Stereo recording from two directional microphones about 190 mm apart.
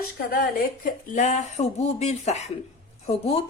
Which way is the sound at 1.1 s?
40° left (ahead or behind).